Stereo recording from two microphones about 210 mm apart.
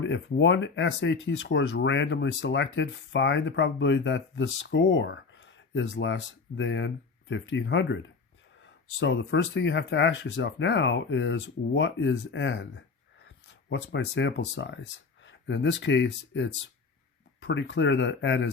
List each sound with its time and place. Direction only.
0.0 s speech: 60° left (ahead or behind)